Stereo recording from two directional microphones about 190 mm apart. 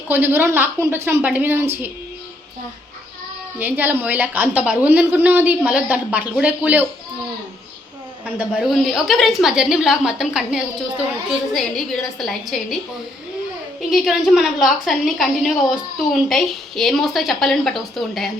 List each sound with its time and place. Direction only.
0.1 s a woman's voice: 10° right (ahead or behind)
3.6 s a woman's voice: 10° right (ahead or behind)
8.4 s a woman's voice: centre (ahead or behind)
13.9 s a woman's voice: centre (ahead or behind)